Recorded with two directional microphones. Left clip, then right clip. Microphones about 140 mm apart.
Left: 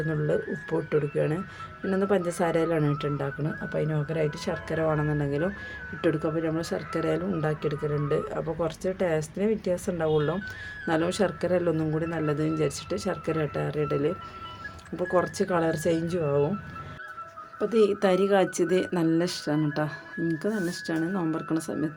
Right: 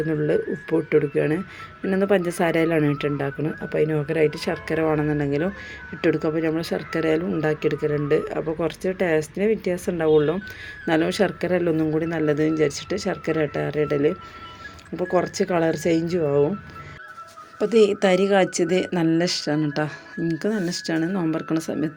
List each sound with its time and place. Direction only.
0.1 s speech: 10° right (ahead or behind)
11.9 s speech: 20° right (ahead or behind)
17.6 s speech: 10° right (ahead or behind)